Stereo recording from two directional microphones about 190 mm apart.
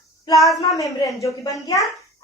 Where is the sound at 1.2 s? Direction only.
15° left (ahead or behind).